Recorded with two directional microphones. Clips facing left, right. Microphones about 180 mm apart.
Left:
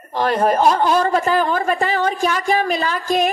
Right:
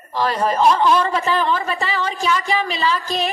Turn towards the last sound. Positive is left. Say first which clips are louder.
# left 2 dB
turn(degrees=50)  # may be behind; listen again after turning